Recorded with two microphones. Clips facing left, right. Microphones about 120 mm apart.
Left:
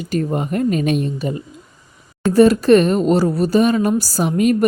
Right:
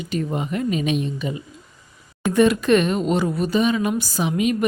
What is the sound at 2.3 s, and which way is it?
Speech, 35° left (ahead or behind).